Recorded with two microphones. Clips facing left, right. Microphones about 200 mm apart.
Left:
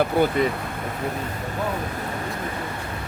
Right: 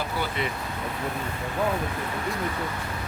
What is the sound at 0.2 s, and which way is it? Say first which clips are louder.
Speech: left 11 dB; 55° left (ahead or behind).